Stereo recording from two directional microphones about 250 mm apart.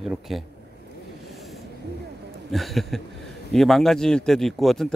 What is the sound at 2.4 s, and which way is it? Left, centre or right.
Speech, centre.